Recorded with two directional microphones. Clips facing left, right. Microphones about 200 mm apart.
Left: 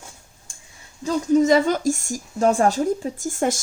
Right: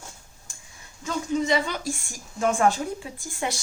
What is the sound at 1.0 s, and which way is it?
Speech, 45° left (ahead or behind).